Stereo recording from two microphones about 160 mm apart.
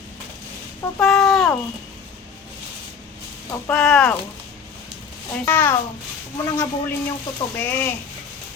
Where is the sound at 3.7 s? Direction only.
5° left (ahead or behind).